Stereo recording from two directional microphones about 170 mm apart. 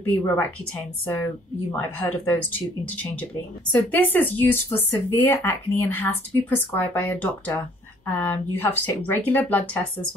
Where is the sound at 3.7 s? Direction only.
10° left (ahead or behind).